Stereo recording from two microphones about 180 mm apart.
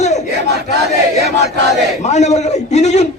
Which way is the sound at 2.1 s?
40° left (ahead or behind).